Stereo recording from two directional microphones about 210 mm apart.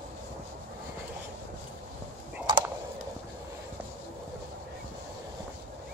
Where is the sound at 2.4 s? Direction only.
20° right (ahead or behind).